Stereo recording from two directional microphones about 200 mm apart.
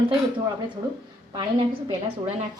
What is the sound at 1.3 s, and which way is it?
Speech, 20° right (ahead or behind).